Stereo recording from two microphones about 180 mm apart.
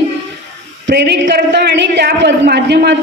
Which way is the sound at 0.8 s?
70° right (ahead or behind).